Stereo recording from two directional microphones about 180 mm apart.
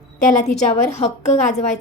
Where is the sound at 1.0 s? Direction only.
40° left (ahead or behind).